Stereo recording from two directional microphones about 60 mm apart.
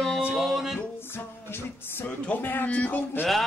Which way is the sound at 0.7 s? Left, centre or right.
Left.